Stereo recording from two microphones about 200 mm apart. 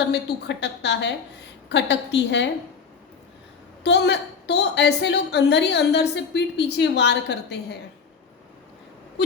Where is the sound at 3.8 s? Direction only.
60° left (ahead or behind).